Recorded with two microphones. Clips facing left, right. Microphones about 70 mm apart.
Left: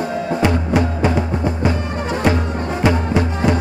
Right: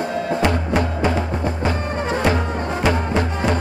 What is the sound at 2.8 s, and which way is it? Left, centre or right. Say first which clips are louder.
Music: left 3 dB; centre.